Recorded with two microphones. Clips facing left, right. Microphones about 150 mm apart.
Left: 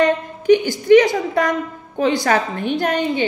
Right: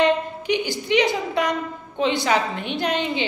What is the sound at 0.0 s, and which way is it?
A woman's voice, 45° left (ahead or behind).